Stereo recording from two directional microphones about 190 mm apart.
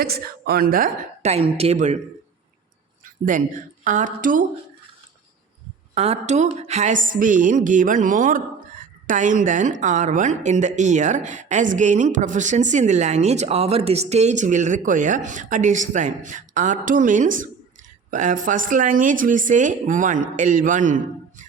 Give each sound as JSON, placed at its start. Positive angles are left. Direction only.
{"t": 0.0, "sound": "speech", "side_deg": -50}
{"t": 3.0, "sound": "speech", "side_deg": -45}
{"t": 5.9, "sound": "a woman's voice", "side_deg": -35}